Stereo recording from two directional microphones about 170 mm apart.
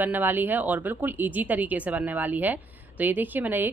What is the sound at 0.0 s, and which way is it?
Speech, 10° right (ahead or behind).